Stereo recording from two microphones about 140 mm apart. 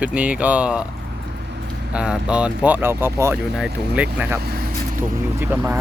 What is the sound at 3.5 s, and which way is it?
Speech, 5° right (ahead or behind).